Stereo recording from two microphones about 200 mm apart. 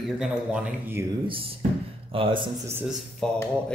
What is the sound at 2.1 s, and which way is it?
Speech, 25° right (ahead or behind).